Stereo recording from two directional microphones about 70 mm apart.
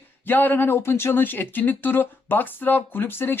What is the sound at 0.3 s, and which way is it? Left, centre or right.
Speech, left.